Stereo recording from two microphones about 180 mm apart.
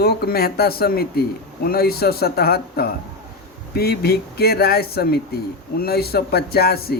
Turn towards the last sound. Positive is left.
turn(degrees=60)  # may be behind; listen again after turning